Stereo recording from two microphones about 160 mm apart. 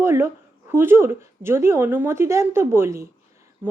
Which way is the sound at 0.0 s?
15° right (ahead or behind).